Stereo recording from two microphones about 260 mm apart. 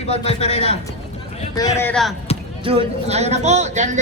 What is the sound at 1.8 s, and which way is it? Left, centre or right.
Speech, centre.